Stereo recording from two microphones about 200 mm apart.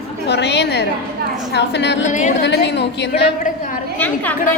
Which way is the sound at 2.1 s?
40° left (ahead or behind).